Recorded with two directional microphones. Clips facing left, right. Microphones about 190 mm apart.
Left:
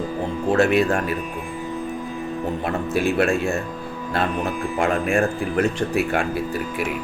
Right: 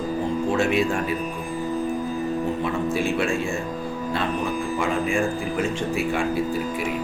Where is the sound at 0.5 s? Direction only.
60° left (ahead or behind).